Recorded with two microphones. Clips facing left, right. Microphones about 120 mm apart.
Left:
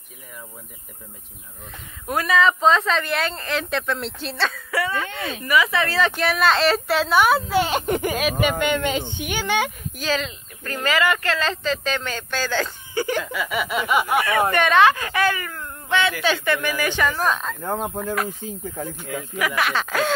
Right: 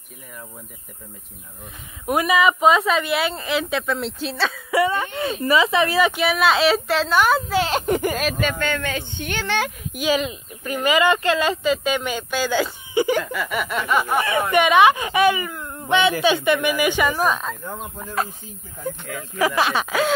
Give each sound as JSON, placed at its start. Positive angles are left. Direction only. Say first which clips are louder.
{"t": 2.0, "sound": "speech", "louder": "right 2 dB", "side_deg": -15}
{"t": 4.6, "sound": "a woman's voice", "louder": "right 5 dB", "side_deg": -15}
{"t": 8.4, "sound": "a man's voice", "louder": "left 3 dB", "side_deg": 15}
{"t": 9.9, "sound": "speech", "louder": "right 4 dB", "side_deg": -15}
{"t": 13.2, "sound": "a woman's voice", "louder": "even", "side_deg": 0}
{"t": 14.5, "sound": "speech", "louder": "right 3 dB", "side_deg": -15}
{"t": 17.6, "sound": "speech", "louder": "left 7 dB", "side_deg": 60}
{"t": 19.3, "sound": "speech", "louder": "right 4 dB", "side_deg": -30}
{"t": 19.9, "sound": "a woman's voice", "louder": "right 1 dB", "side_deg": -5}